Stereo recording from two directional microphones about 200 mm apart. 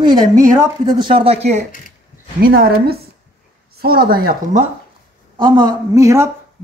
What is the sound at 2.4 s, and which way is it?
Speech, 50° right (ahead or behind).